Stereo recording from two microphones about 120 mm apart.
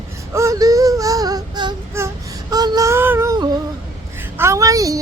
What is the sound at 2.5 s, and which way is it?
Child singing, 30° right (ahead or behind).